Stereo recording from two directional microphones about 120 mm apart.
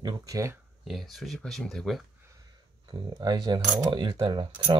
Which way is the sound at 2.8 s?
45° right (ahead or behind).